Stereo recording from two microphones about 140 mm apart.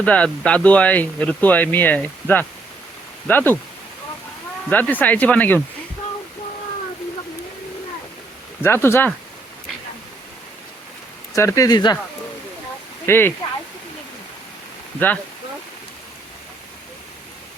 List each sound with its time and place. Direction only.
0.0 s speech: 10° left (ahead or behind)
4.7 s speech: 10° left (ahead or behind)
8.6 s speech: 15° left (ahead or behind)
11.3 s speech: 25° left (ahead or behind)
13.1 s speech: 15° left (ahead or behind)
14.9 s speech: 10° left (ahead or behind)